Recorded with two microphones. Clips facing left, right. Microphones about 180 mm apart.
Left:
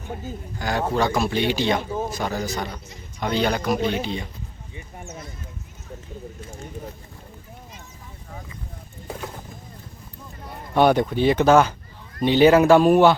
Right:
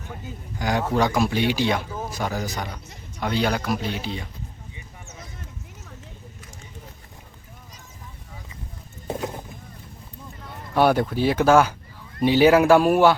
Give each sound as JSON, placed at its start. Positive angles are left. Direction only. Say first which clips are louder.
{"t": 0.6, "sound": "speech", "louder": "right 1 dB", "side_deg": -15}
{"t": 1.9, "sound": "speech", "louder": "left 5 dB", "side_deg": 25}
{"t": 2.1, "sound": "speech", "louder": "left 2 dB", "side_deg": -10}
{"t": 10.8, "sound": "speech", "louder": "left 2 dB", "side_deg": -5}